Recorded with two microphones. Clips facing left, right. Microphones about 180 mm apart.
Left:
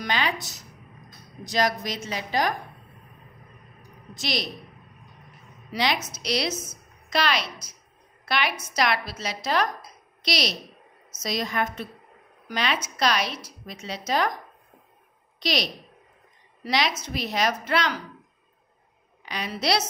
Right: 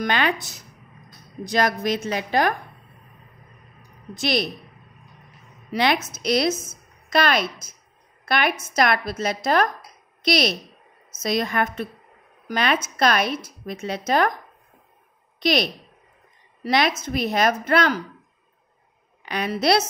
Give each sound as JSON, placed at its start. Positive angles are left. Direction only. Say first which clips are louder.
{"t": 0.0, "sound": "a woman's voice", "louder": "right 5 dB", "side_deg": -55}
{"t": 4.1, "sound": "a woman's voice", "louder": "right 7 dB", "side_deg": -55}
{"t": 5.7, "sound": "a woman's voice", "louder": "right 5 dB", "side_deg": -55}
{"t": 15.4, "sound": "a woman's voice", "louder": "right 6 dB", "side_deg": -55}
{"t": 19.2, "sound": "a woman's voice", "louder": "right 6 dB", "side_deg": -55}